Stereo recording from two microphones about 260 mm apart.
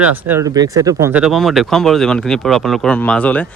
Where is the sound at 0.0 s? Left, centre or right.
Centre.